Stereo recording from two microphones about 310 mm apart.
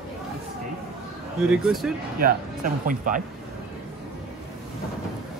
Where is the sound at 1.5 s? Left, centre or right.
Centre.